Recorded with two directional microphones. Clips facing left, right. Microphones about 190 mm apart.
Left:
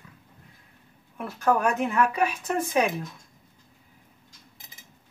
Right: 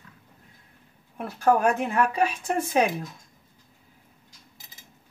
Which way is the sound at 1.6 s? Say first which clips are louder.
Right 1 dB; 30° right (ahead or behind).